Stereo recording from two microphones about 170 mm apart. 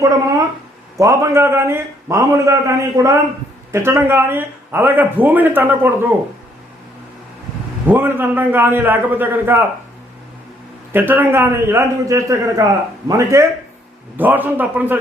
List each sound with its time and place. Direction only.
0.9 s speech: 15° right (ahead or behind)
7.9 s speech: 10° right (ahead or behind)
10.9 s speech: 10° right (ahead or behind)